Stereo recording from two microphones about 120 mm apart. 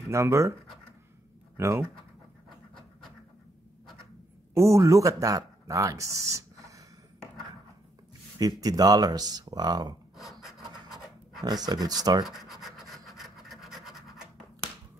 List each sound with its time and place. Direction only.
0.1 s speech: 25° right (ahead or behind)
1.6 s speech: 25° right (ahead or behind)
4.6 s speech: 25° right (ahead or behind)
8.4 s speech: 30° right (ahead or behind)
10.1 s a sound: centre (ahead or behind)
11.4 s speech: 35° right (ahead or behind)
12.3 s scratch: centre (ahead or behind)